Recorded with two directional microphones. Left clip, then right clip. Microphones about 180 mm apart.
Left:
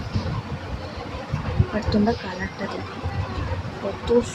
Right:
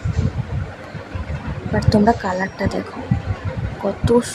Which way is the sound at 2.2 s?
25° right (ahead or behind).